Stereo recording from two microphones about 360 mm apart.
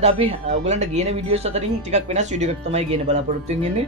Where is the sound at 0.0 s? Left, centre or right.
Centre.